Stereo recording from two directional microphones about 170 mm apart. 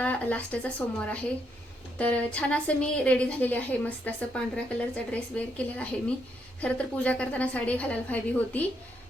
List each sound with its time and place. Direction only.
0.0 s a woman's voice: 10° left (ahead or behind)